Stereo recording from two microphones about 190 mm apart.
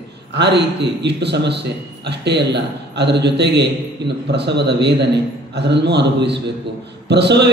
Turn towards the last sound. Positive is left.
turn(degrees=-65)  # may be behind; listen again after turning